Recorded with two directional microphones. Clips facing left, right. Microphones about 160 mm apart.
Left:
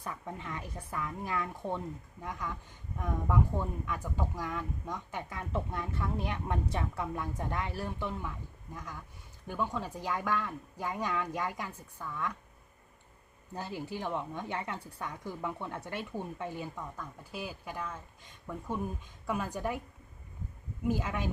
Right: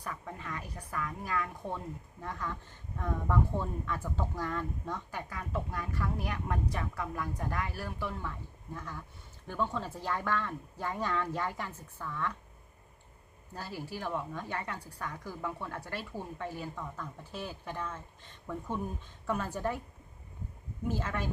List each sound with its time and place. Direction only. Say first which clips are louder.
0.0 s speech: left 1 dB; 20° left (ahead or behind)
13.5 s speech: left 2 dB; 20° left (ahead or behind)
20.8 s speech: left 2 dB; 15° left (ahead or behind)